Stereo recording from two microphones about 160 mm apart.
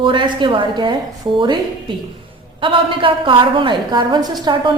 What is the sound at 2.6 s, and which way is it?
A woman's voice, 30° right (ahead or behind).